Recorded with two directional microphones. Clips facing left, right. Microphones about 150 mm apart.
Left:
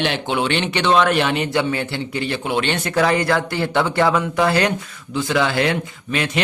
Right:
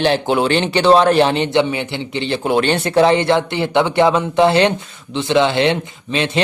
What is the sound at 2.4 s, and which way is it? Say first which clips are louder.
Speech: right 8 dB; 40° right (ahead or behind).